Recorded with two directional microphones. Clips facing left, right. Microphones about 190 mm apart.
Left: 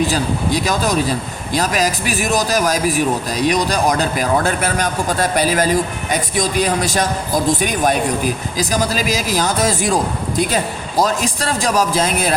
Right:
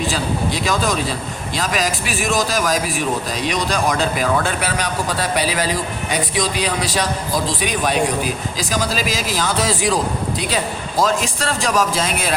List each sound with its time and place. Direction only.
1.5 s a man's voice: 40° left (ahead or behind)